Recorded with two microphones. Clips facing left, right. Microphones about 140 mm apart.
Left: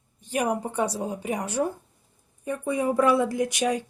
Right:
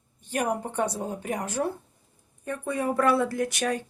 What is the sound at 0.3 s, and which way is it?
Speech, 10° left (ahead or behind).